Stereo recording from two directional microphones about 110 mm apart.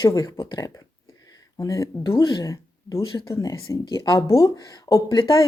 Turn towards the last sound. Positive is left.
turn(degrees=45)  # may be behind; listen again after turning